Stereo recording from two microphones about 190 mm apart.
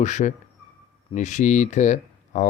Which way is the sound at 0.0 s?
40° left (ahead or behind).